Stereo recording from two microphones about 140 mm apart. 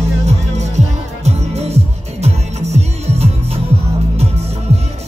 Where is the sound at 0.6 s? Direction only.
50° right (ahead or behind).